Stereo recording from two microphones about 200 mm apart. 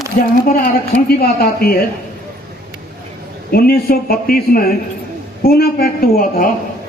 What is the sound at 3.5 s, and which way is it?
A woman's voice, 50° left (ahead or behind).